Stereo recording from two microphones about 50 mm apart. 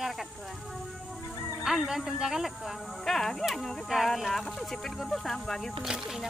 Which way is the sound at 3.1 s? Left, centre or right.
Centre.